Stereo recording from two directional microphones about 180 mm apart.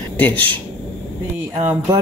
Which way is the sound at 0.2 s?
10° left (ahead or behind).